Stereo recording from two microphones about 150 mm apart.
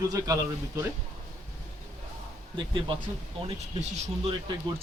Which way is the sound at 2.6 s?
30° right (ahead or behind).